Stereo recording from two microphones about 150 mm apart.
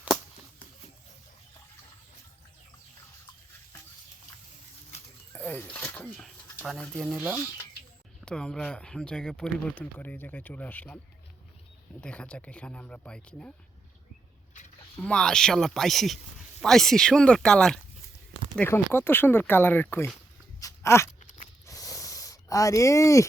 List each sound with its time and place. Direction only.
4.9 s a sound: 10° left (ahead or behind)
7.1 s speech: 10° right (ahead or behind)
8.2 s speech: 5° left (ahead or behind)
11.9 s speech: 5° left (ahead or behind)
15.0 s speech: 5° left (ahead or behind)
20.6 s a sound: 20° left (ahead or behind)
21.7 s snort: 20° left (ahead or behind)